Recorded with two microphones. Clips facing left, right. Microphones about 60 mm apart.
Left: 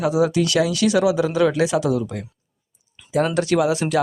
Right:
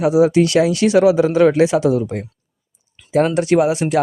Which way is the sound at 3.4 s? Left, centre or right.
Right.